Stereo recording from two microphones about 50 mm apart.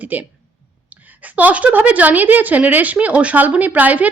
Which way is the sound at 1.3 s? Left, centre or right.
Right.